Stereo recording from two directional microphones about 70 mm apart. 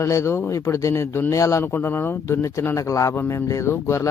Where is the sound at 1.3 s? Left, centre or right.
Left.